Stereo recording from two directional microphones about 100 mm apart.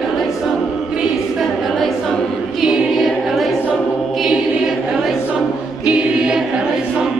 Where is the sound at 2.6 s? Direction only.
Centre (ahead or behind).